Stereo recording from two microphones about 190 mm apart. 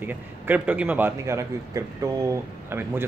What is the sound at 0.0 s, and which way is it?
A man's voice, 10° right (ahead or behind).